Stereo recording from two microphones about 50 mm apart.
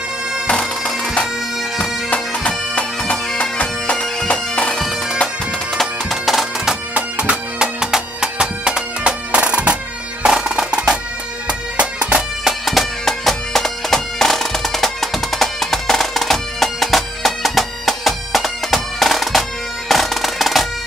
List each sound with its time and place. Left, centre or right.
0.5 s bagpipes: centre
3.9 s bagpipes: centre
4.3 s bagpipes: left
5.8 s bagpipes: centre
6.9 s music: right
10.2 s music: centre
12.4 s bagpipes: centre
19.9 s music: centre